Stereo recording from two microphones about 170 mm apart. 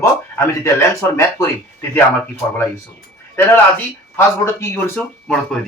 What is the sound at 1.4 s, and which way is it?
Speech, 20° left (ahead or behind).